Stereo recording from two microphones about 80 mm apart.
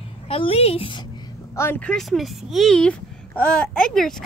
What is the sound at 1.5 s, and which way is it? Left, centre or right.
Speech, left.